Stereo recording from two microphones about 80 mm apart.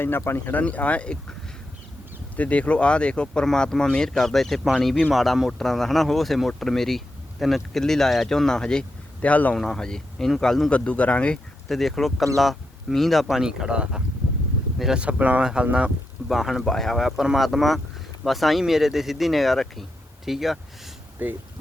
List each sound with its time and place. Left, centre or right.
0.0 s speech: left
0.6 s speech: centre
2.3 s speech: centre
9.6 s speech: centre
10.7 s speech: centre
11.7 s speech: centre
15.0 s speech: centre
16.3 s speech: centre
21.2 s speech: right